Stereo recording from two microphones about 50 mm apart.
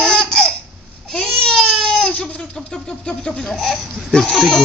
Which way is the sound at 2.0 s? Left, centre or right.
Left.